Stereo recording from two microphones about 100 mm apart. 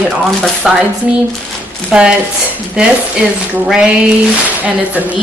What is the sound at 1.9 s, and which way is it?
Speech, 10° right (ahead or behind).